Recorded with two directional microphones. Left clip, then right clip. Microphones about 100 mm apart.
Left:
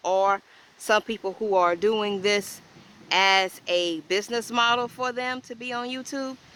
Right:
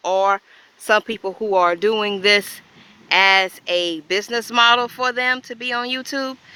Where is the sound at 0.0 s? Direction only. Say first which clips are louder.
Right 5 dB; 20° right (ahead or behind).